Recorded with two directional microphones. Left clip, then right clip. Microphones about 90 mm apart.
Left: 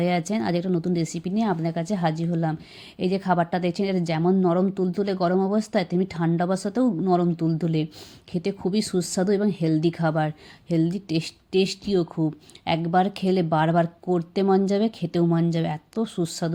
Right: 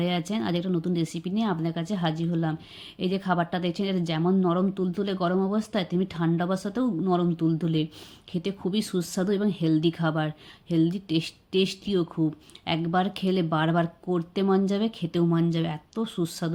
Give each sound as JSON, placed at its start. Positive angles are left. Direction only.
{"t": 0.0, "sound": "speech", "side_deg": 45}